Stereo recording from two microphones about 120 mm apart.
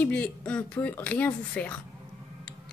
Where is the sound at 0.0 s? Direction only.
10° left (ahead or behind).